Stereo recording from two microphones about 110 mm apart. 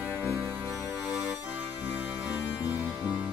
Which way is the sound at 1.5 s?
15° right (ahead or behind).